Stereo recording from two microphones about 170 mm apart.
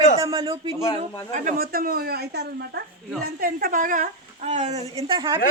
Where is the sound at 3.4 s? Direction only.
55° right (ahead or behind); by 5.4 s 30° right (ahead or behind).